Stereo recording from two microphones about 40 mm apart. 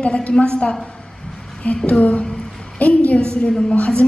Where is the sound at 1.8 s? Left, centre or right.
Left.